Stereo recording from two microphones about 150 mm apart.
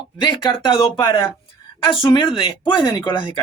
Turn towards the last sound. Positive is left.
turn(degrees=30)  # may be behind; listen again after turning